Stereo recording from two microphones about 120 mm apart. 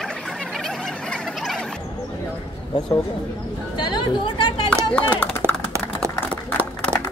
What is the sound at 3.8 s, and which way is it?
Speech, 40° left (ahead or behind).